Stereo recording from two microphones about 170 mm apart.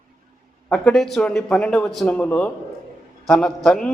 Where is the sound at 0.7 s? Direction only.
5° left (ahead or behind).